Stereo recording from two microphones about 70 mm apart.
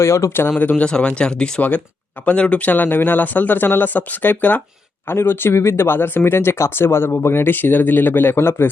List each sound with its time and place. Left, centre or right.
0.0 s speech: left
0.6 s speech: left
0.9 s speech: centre; by 8.7 s left